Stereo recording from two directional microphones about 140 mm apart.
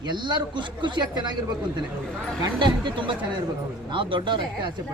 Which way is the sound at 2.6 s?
35° right (ahead or behind).